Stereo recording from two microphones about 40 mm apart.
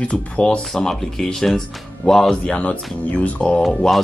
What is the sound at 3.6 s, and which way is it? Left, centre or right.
Speech, centre.